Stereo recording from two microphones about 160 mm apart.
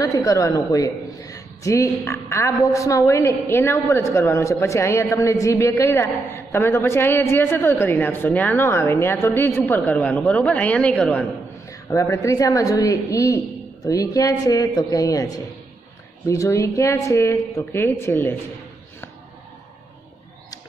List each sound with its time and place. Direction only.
0.0 s a woman's voice: 20° left (ahead or behind)
11.9 s a woman's voice: 20° left (ahead or behind)